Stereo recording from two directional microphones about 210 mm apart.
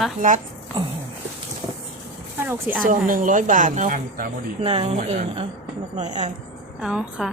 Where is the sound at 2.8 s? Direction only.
40° right (ahead or behind).